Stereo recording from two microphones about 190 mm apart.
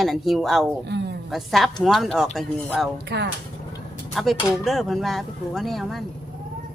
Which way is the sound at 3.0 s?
65° right (ahead or behind).